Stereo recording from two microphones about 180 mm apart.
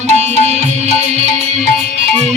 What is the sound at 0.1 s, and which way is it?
Music, 40° right (ahead or behind).